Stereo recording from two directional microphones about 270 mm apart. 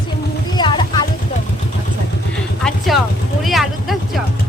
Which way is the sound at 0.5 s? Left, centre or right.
Centre.